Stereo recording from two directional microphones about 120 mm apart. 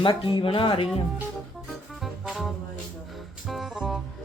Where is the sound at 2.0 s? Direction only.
Centre (ahead or behind).